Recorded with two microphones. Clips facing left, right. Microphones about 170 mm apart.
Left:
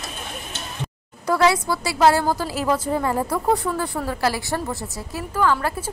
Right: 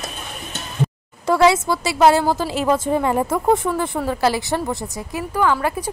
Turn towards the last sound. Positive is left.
turn(degrees=-15)  # may be behind; listen again after turning